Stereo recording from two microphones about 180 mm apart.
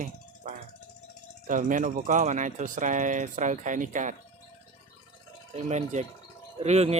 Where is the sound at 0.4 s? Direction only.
50° right (ahead or behind).